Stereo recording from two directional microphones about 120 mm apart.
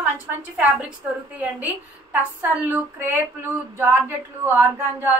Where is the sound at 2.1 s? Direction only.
15° right (ahead or behind).